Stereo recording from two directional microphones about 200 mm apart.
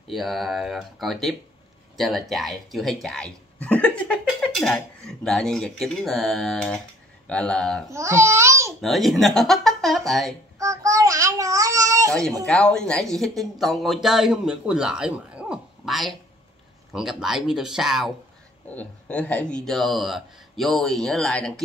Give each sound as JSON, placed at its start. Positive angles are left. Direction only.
{"t": 0.1, "sound": "speech", "side_deg": 0}
{"t": 7.9, "sound": "child singing", "side_deg": -15}
{"t": 8.8, "sound": "speech", "side_deg": 0}
{"t": 10.6, "sound": "child singing", "side_deg": -15}
{"t": 12.1, "sound": "speech", "side_deg": 5}